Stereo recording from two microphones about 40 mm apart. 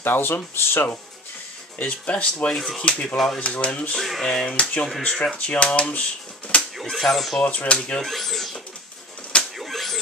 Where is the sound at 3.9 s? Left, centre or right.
Centre.